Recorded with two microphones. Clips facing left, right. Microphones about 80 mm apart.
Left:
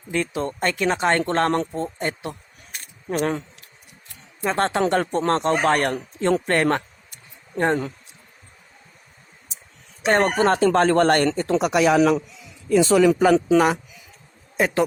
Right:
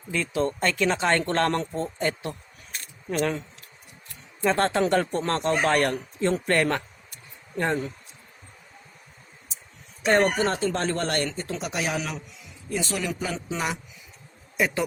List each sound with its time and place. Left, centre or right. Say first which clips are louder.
0.1 s speech: left 1 dB; left
3.1 s speech: left 3 dB; left
4.4 s speech: left 1 dB; left
6.1 s speech: left 5 dB; left
6.5 s speech: left 3 dB; left
10.1 s speech: left 3 dB; left
10.6 s speech: left 10 dB; left
12.7 s speech: left 13 dB; left